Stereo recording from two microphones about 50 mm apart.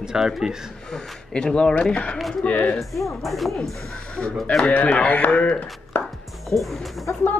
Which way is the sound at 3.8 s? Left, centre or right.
Left.